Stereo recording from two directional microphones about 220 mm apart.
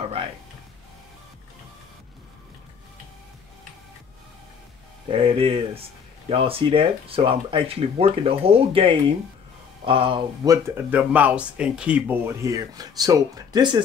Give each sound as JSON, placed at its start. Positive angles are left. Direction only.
{"t": 5.0, "sound": "speech", "side_deg": -25}